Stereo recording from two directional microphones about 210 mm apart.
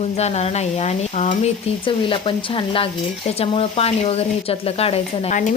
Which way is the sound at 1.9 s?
25° left (ahead or behind).